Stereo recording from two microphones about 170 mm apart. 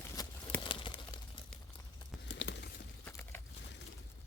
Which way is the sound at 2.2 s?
90° left.